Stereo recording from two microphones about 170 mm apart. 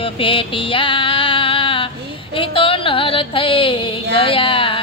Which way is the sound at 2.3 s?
30° left (ahead or behind).